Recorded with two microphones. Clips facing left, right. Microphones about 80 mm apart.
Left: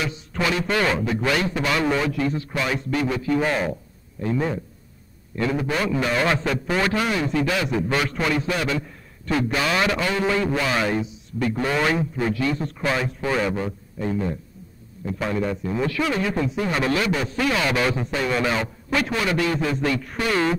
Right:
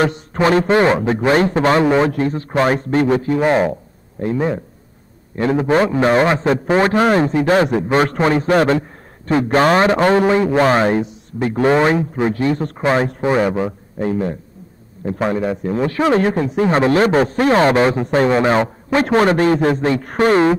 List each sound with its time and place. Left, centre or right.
0.0 s a man's voice: right
5.3 s a man's voice: right
9.3 s a man's voice: right
10.6 s a man's voice: right
12.5 s speech: right
12.8 s a man's voice: right
13.7 s a man's voice: right
15.0 s a man's voice: right